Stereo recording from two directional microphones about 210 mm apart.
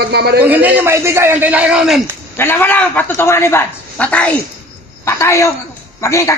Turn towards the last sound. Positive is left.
turn(degrees=15)  # may be behind; listen again after turning